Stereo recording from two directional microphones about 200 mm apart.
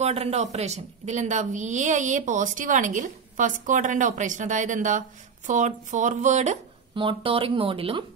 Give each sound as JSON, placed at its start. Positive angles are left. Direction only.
{"t": 0.0, "sound": "a woman's voice", "side_deg": -30}